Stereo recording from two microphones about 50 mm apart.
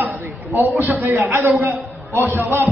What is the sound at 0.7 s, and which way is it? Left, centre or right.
Speech, right.